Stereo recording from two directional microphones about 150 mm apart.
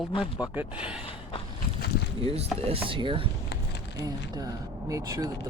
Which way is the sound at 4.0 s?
25° right (ahead or behind).